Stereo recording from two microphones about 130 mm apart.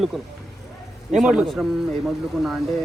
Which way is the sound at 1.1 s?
5° right (ahead or behind).